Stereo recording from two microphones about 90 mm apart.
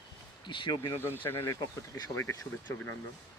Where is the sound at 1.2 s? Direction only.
25° left (ahead or behind).